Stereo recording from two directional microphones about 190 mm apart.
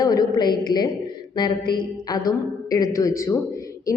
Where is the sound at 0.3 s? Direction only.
20° left (ahead or behind).